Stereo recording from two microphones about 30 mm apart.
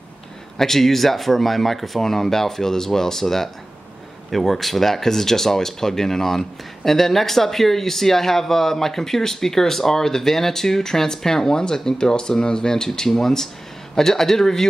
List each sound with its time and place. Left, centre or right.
0.6 s speech: centre